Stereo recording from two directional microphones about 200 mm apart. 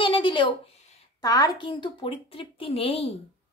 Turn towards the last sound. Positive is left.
turn(degrees=30)  # may be behind; listen again after turning